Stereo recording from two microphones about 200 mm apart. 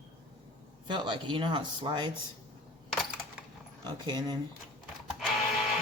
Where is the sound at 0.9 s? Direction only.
25° right (ahead or behind).